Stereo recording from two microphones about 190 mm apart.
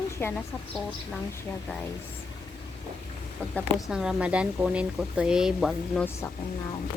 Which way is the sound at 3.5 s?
Centre (ahead or behind).